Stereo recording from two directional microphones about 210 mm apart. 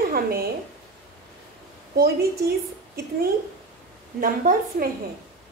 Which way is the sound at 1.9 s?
50° right (ahead or behind).